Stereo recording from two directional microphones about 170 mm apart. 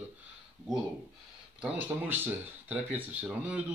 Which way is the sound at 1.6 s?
10° right (ahead or behind).